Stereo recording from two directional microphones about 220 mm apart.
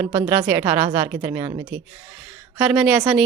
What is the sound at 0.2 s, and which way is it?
Speech, 10° right (ahead or behind).